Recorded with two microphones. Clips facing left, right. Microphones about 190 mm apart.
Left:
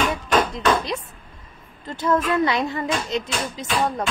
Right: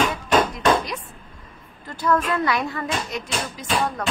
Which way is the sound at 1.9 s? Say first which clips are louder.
Left 1 dB; 25° left (ahead or behind).